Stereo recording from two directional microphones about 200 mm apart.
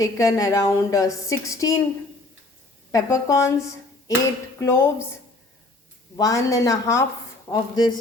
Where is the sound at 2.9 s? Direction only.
15° left (ahead or behind).